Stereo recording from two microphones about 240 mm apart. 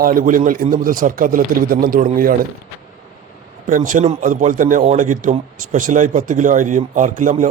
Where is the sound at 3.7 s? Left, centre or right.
Right.